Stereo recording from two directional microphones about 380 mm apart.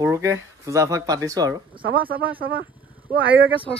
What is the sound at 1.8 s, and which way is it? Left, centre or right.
Speech, right.